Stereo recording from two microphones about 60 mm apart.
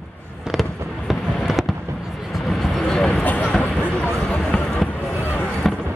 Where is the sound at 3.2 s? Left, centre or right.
Left.